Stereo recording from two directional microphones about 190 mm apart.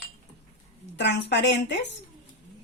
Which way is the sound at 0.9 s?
65° left (ahead or behind).